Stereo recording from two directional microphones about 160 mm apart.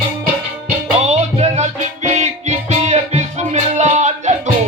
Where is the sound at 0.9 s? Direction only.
40° right (ahead or behind).